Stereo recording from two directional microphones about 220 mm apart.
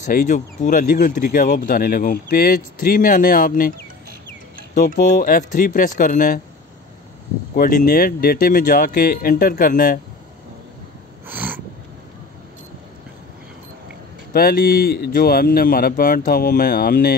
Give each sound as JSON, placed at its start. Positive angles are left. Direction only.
{"t": 0.0, "sound": "speech", "side_deg": 35}
{"t": 4.7, "sound": "speech", "side_deg": 40}
{"t": 7.5, "sound": "speech", "side_deg": 40}
{"t": 11.2, "sound": "snort", "side_deg": -10}
{"t": 14.3, "sound": "speech", "side_deg": 40}